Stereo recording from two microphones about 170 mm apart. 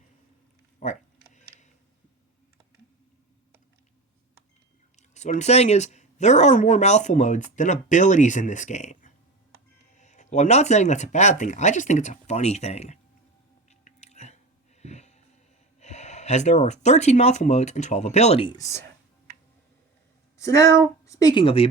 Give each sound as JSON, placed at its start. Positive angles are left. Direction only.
{"t": 0.8, "sound": "speech", "side_deg": 45}
{"t": 1.3, "sound": "a sound", "side_deg": 45}
{"t": 5.1, "sound": "speech", "side_deg": 45}
{"t": 13.7, "sound": "chewing", "side_deg": 40}
{"t": 14.8, "sound": "music", "side_deg": 40}
{"t": 15.8, "sound": "speech", "side_deg": 40}
{"t": 18.5, "sound": "speech", "side_deg": 20}
{"t": 20.4, "sound": "speech", "side_deg": 20}
{"t": 21.4, "sound": "speech", "side_deg": 35}